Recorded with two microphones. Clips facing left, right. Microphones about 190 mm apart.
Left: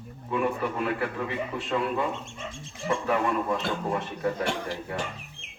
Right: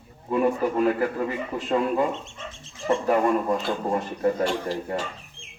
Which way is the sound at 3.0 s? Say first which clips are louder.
Right 5 dB; 40° right (ahead or behind).